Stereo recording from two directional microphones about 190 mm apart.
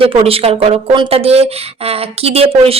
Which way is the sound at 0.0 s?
30° right (ahead or behind).